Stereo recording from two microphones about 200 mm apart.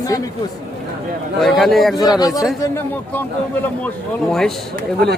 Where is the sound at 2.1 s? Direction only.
20° left (ahead or behind).